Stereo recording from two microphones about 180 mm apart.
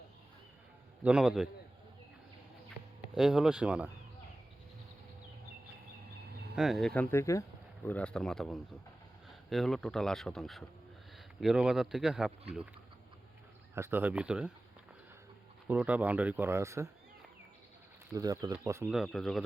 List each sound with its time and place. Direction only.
1.0 s speech: 5° right (ahead or behind)
3.2 s speech: 5° right (ahead or behind)
6.6 s speech: centre (ahead or behind)
13.7 s speech: 15° right (ahead or behind)
15.6 s speech: 10° right (ahead or behind)
18.1 s speech: 20° right (ahead or behind)
18.9 s speech: centre (ahead or behind)